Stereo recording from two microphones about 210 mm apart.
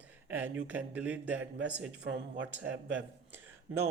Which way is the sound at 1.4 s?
65° right (ahead or behind).